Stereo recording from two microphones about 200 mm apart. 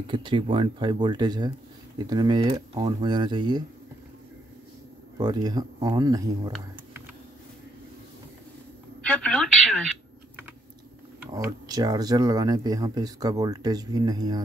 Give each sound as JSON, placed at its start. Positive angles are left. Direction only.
{"t": 0.0, "sound": "speech", "side_deg": -25}
{"t": 5.1, "sound": "speech", "side_deg": -20}
{"t": 9.0, "sound": "a sound", "side_deg": 5}
{"t": 11.3, "sound": "speech", "side_deg": -20}